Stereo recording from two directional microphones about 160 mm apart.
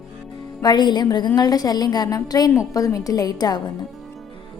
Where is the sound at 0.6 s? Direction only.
25° left (ahead or behind).